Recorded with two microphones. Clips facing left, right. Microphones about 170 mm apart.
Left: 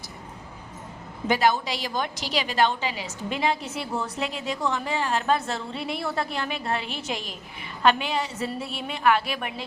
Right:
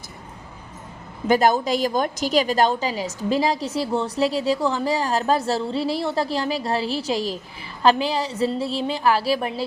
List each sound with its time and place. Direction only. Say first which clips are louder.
1.3 s a woman's voice: right 5 dB; 45° right (ahead or behind)